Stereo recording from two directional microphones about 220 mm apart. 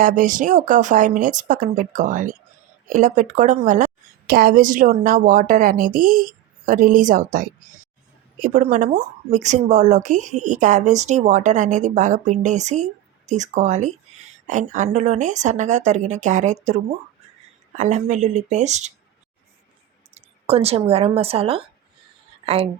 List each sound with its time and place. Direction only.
0.0 s a woman's voice: 35° right (ahead or behind)
20.1 s speech: 25° right (ahead or behind)